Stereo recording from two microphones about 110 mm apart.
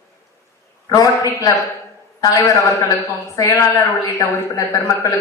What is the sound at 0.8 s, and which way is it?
A man's voice, 35° left (ahead or behind).